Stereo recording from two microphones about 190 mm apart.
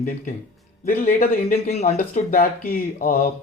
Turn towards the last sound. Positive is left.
turn(degrees=50)  # may be behind; listen again after turning